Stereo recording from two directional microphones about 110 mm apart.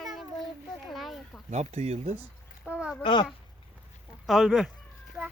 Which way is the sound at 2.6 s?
10° right (ahead or behind).